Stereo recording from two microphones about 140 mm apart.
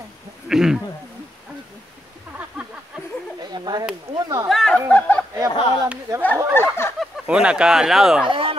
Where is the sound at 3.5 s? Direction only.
30° right (ahead or behind).